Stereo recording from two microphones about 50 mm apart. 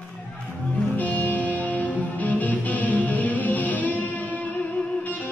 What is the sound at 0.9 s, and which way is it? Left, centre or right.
Music, left.